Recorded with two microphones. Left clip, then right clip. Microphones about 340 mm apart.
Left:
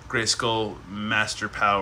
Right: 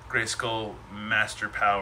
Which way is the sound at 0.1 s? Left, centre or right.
Centre.